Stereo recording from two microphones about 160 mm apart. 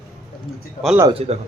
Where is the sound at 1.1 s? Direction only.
40° right (ahead or behind).